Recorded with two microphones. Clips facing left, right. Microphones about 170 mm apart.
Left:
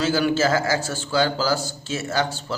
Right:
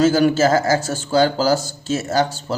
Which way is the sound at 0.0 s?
45° right (ahead or behind).